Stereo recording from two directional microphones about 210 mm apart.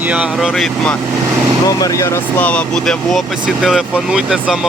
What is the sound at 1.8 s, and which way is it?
Speech, 15° left (ahead or behind).